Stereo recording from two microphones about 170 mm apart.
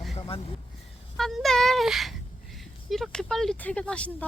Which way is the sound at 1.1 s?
Centre (ahead or behind).